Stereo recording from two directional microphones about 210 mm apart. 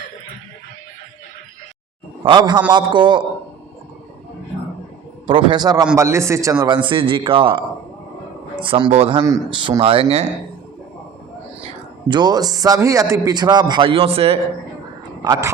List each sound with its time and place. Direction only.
2.2 s a man's voice: 20° right (ahead or behind)
5.2 s a man's voice: 25° right (ahead or behind)
8.6 s a man's voice: 25° right (ahead or behind)
12.0 s a man's voice: 20° right (ahead or behind)
15.2 s a man's voice: 15° right (ahead or behind)